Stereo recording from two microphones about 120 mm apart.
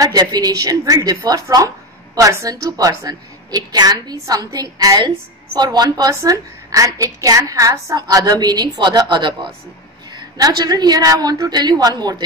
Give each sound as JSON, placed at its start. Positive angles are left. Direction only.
{"t": 0.0, "sound": "a woman's voice", "side_deg": -35}